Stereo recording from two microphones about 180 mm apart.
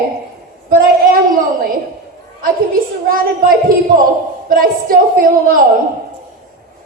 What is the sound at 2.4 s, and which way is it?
A woman's voice, 50° right (ahead or behind).